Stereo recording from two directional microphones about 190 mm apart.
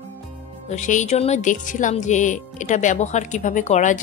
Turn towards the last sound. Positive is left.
turn(degrees=40)  # may be behind; listen again after turning